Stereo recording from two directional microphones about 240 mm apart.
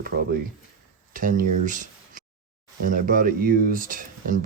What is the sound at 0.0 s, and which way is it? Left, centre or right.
Speech, right.